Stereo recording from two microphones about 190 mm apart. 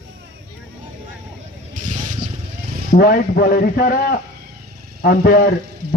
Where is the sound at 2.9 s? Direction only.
55° left (ahead or behind).